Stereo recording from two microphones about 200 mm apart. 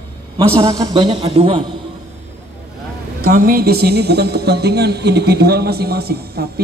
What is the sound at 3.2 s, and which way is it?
A woman's voice, 45° right (ahead or behind).